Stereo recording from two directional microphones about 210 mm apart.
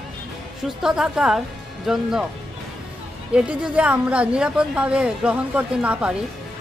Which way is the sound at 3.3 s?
5° right (ahead or behind).